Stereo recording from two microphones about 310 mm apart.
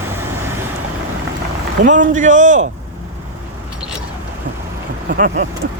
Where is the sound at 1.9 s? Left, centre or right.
Right.